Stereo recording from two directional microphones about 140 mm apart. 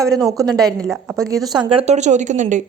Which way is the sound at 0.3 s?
25° right (ahead or behind).